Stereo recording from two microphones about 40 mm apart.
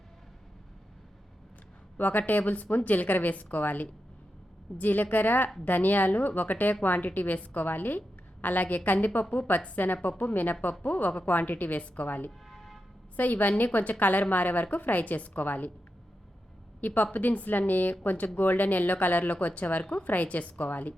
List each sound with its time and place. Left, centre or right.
2.0 s a woman's voice: left
12.5 s a sound: centre
13.1 s speech: left
16.8 s speech: left
19.8 s a woman's voice: left
20.1 s a woman's voice: left